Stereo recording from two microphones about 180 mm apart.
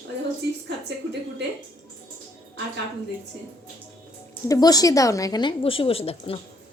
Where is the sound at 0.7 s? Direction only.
70° right (ahead or behind).